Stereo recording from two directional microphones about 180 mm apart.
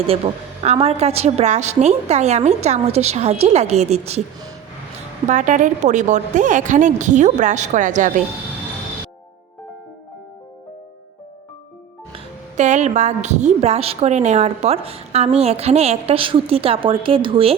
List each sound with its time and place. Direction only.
0.2 s a woman's voice: 30° right (ahead or behind)
5.3 s a woman's voice: 45° right (ahead or behind)
12.1 s a woman's voice: 40° right (ahead or behind)